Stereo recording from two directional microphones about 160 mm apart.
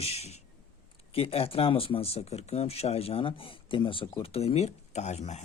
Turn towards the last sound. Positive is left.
turn(degrees=45)  # may be behind; listen again after turning